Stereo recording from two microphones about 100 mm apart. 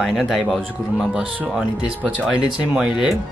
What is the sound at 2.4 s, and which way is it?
Speech, 10° right (ahead or behind).